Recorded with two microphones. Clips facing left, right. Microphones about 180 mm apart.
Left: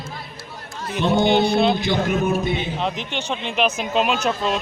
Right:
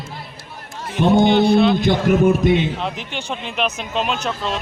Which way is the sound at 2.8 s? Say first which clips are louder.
Left 1 dB; 5° right (ahead or behind).